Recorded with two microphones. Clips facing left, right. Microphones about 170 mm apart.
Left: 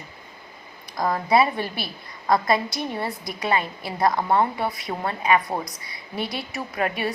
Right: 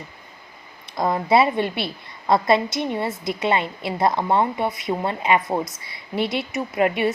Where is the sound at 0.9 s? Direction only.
25° right (ahead or behind).